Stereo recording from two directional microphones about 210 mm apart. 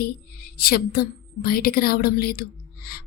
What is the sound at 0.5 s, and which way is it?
Music, 45° left (ahead or behind).